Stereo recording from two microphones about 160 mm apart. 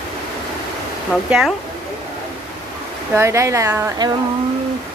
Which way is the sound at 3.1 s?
15° right (ahead or behind).